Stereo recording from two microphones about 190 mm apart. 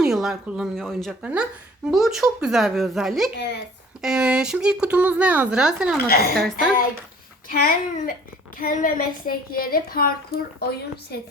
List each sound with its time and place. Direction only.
0.0 s a woman's voice: centre (ahead or behind)
6.1 s a woman's voice: 55° left (ahead or behind)
7.4 s a woman's voice: 50° left (ahead or behind)